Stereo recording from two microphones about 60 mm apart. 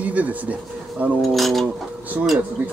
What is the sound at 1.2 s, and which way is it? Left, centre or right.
Speech, centre.